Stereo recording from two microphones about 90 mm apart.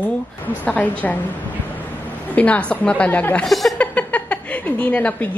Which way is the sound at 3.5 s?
Centre (ahead or behind).